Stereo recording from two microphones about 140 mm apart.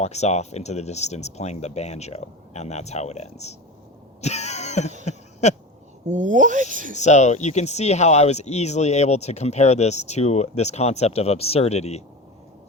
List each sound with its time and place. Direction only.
0.0 s speech: 55° left (ahead or behind)
4.2 s throat clearing: 55° left (ahead or behind)
5.0 s a sound: 55° left (ahead or behind)
6.1 s speech: 60° right (ahead or behind)
6.9 s speech: 55° left (ahead or behind)